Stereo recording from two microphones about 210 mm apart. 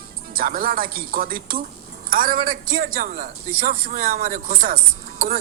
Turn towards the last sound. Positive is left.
turn(degrees=-45)  # may be behind; listen again after turning